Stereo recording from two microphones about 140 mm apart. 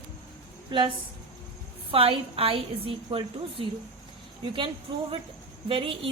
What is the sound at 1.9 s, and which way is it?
A woman's voice, 40° right (ahead or behind).